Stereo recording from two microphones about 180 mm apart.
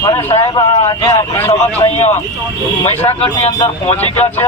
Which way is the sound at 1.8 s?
35° left (ahead or behind).